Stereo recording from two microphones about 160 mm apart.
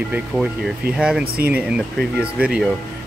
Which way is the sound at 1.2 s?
75° right (ahead or behind).